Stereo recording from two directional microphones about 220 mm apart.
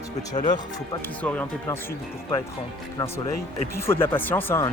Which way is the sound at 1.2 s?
5° left (ahead or behind).